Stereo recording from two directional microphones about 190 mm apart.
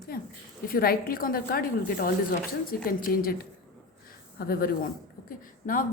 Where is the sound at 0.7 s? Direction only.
50° left (ahead or behind).